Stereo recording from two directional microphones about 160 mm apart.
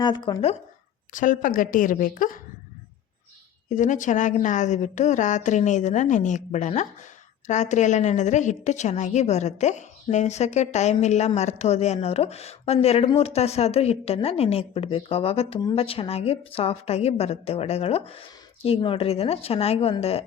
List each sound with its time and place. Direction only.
0.0 s speech: 30° left (ahead or behind)
1.1 s a woman's voice: 55° left (ahead or behind)
3.7 s a woman's voice: 50° left (ahead or behind)